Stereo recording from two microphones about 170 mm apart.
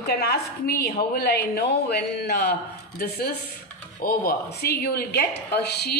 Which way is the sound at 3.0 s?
65° left (ahead or behind).